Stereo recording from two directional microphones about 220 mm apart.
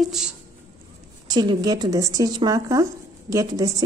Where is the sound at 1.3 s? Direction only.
20° right (ahead or behind).